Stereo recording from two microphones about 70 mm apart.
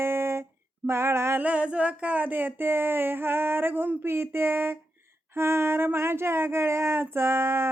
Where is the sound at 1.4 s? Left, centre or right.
Centre.